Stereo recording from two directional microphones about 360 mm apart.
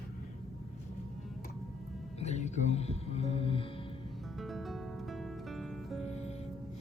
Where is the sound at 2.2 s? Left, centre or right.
Centre.